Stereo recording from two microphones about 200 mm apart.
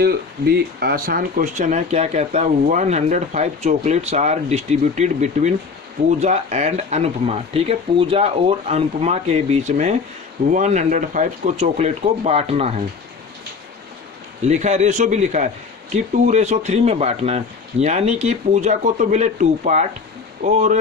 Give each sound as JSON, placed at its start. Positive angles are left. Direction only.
{"t": 0.0, "sound": "speech", "side_deg": -50}
{"t": 14.4, "sound": "speech", "side_deg": -35}